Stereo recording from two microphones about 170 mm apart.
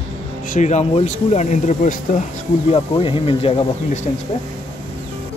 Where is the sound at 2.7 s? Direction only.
35° left (ahead or behind).